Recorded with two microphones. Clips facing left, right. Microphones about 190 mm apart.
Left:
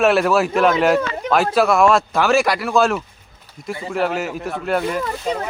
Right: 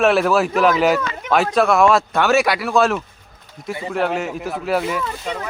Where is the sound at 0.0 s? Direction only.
Centre (ahead or behind).